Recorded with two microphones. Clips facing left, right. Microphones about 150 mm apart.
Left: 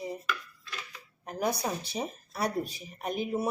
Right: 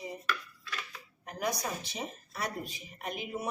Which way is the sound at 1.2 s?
30° left (ahead or behind).